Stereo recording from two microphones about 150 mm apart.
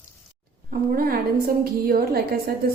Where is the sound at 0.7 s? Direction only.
75° right (ahead or behind).